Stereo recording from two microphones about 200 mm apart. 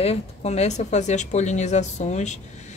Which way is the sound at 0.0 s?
30° left (ahead or behind).